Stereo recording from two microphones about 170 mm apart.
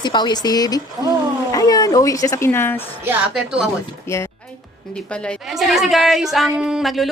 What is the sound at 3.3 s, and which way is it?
Speech, centre (ahead or behind).